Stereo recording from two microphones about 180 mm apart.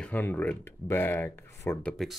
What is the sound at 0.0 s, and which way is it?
Speech, 10° left (ahead or behind).